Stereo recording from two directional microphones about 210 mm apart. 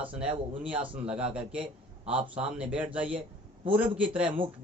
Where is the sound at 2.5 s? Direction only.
5° right (ahead or behind).